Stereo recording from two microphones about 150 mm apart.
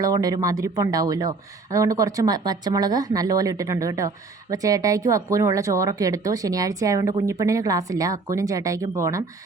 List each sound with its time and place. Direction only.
0.0 s speech: 25° right (ahead or behind)